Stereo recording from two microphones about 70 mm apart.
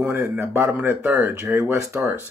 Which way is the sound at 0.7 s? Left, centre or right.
Right.